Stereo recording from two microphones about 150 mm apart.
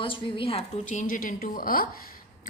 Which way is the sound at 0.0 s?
35° left (ahead or behind).